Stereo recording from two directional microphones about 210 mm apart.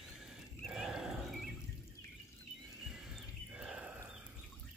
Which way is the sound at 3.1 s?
5° right (ahead or behind).